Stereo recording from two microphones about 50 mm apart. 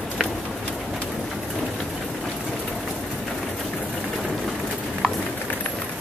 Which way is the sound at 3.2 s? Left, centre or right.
Centre.